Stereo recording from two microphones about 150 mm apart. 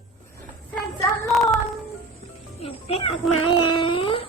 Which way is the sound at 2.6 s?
40° left (ahead or behind).